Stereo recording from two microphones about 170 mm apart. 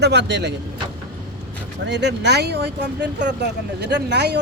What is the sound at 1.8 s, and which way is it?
Speech, 90° right.